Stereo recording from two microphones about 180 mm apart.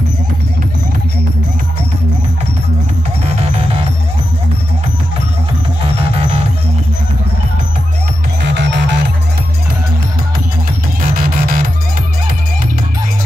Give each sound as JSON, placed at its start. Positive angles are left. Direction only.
{"t": 8.5, "sound": "music", "side_deg": -75}
{"t": 11.1, "sound": "music", "side_deg": -50}